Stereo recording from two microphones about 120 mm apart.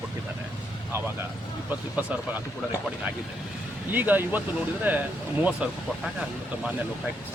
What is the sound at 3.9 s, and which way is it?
Speech, 15° right (ahead or behind).